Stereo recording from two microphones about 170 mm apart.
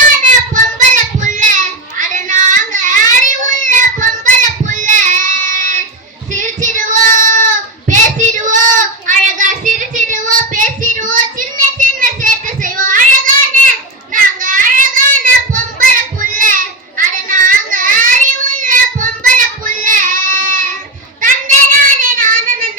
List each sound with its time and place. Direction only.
0.2 s child singing: 45° right (ahead or behind)
8.4 s child singing: 50° right (ahead or behind)